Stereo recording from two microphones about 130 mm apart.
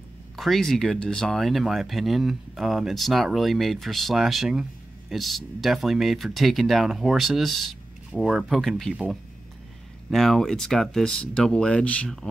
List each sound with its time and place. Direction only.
0.4 s speech: centre (ahead or behind)
10.0 s speech: centre (ahead or behind)